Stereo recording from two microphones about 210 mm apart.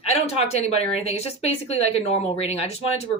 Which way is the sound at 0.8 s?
30° left (ahead or behind).